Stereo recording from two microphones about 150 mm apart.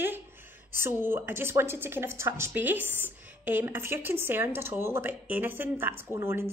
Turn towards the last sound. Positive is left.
turn(degrees=-15)  # may be behind; listen again after turning